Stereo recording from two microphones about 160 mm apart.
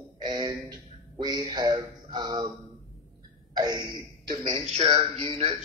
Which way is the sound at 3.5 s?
25° right (ahead or behind).